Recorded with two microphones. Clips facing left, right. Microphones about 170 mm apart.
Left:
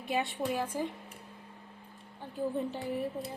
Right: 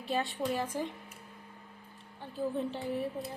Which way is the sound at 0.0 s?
15° left (ahead or behind).